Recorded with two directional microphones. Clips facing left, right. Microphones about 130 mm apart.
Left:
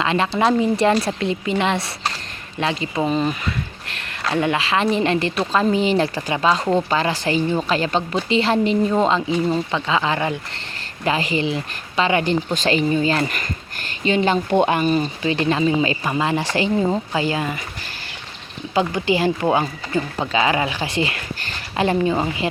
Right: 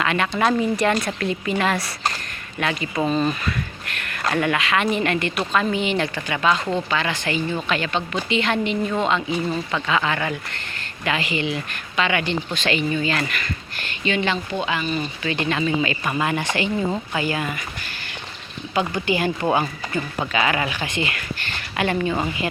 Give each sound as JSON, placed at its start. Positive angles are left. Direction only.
{"t": 0.0, "sound": "speech", "side_deg": 25}
{"t": 14.5, "sound": "speech", "side_deg": 55}
{"t": 15.2, "sound": "speech", "side_deg": 30}
{"t": 18.7, "sound": "speech", "side_deg": 25}